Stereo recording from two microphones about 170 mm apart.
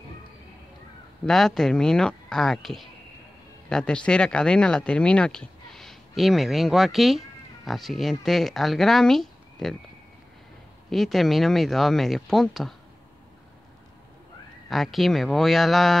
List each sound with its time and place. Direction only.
1.2 s speech: centre (ahead or behind)
10.9 s speech: centre (ahead or behind)
14.7 s speech: centre (ahead or behind)